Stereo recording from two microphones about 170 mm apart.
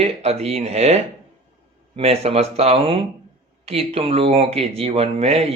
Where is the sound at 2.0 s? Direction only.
35° right (ahead or behind).